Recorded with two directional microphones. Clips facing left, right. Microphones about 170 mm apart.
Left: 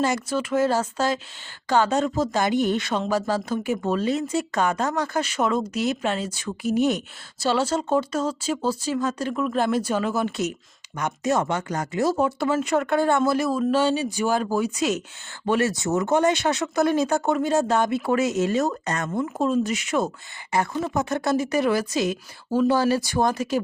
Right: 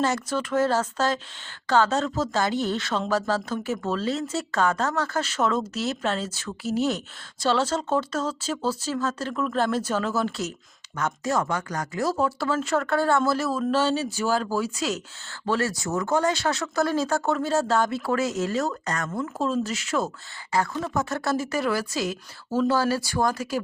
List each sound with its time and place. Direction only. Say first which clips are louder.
0.0 s speech: left 2 dB; 10° left (ahead or behind)